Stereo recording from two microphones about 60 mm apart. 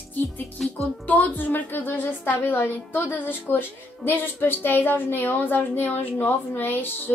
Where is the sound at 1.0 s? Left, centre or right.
Left.